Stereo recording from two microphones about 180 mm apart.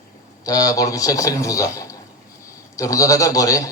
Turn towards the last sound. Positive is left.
turn(degrees=20)  # may be behind; listen again after turning